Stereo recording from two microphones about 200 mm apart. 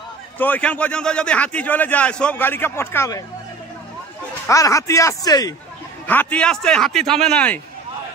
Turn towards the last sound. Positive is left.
turn(degrees=5)  # may be behind; listen again after turning